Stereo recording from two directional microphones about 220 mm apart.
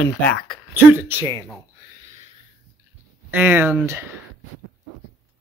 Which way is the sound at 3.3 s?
10° right (ahead or behind).